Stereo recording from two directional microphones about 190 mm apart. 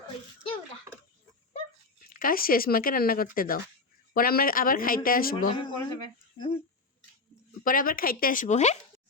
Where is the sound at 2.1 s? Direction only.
50° left (ahead or behind).